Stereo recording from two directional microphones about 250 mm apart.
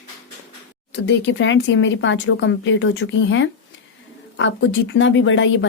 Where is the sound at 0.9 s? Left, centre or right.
Left.